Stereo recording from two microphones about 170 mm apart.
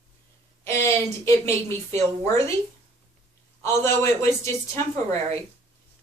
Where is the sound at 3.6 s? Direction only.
15° left (ahead or behind).